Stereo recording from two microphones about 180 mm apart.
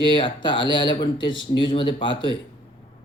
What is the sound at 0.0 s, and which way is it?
Speech, 25° left (ahead or behind).